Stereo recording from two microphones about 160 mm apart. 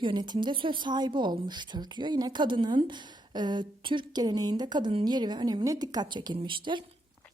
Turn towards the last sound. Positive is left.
turn(degrees=-30)  # may be behind; listen again after turning